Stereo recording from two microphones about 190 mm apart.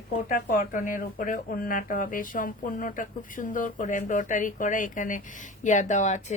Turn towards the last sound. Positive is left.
turn(degrees=40)  # may be behind; listen again after turning